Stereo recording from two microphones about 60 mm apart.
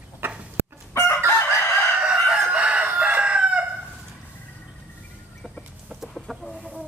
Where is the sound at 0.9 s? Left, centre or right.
Left.